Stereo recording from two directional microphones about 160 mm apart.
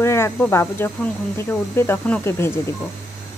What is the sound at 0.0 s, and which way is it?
Speech, 15° left (ahead or behind).